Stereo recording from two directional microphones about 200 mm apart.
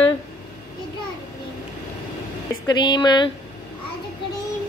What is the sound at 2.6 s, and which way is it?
Speech, 20° left (ahead or behind).